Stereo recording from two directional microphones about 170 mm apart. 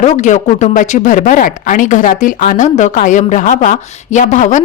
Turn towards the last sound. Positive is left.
turn(degrees=45)  # may be behind; listen again after turning